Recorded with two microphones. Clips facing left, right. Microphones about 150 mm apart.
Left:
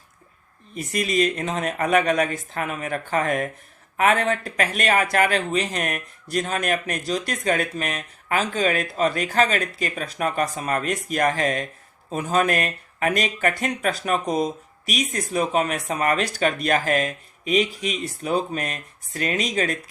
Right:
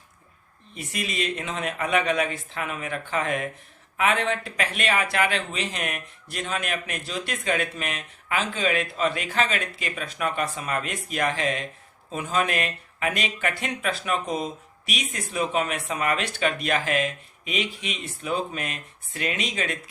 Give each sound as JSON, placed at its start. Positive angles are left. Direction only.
{"t": 0.7, "sound": "speech", "side_deg": 40}